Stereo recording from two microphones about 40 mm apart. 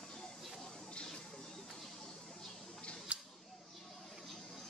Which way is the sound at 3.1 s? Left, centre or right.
Right.